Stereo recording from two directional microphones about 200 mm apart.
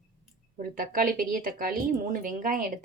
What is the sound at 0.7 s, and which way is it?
Speech, 45° right (ahead or behind).